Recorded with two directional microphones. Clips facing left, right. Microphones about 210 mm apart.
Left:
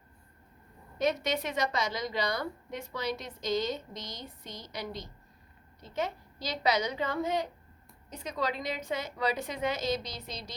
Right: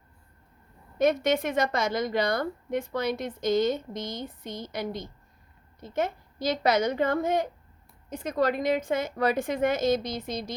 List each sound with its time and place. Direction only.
0.9 s a woman's voice: 50° right (ahead or behind)